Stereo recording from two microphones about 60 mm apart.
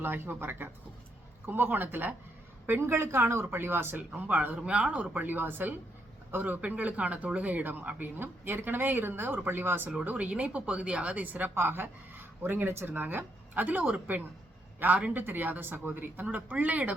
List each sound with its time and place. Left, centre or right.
0.0 s speech: right
2.8 s a woman's voice: right
3.9 s speech: right
4.6 s speech: right
5.1 s speech: right
10.0 s speech: right
11.5 s speech: right